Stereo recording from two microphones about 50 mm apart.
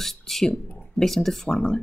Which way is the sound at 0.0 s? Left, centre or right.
Centre.